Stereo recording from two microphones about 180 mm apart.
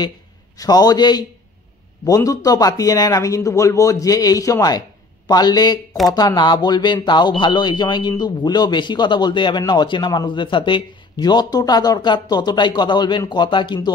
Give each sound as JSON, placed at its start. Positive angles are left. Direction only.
{"t": 0.6, "sound": "speech", "side_deg": 20}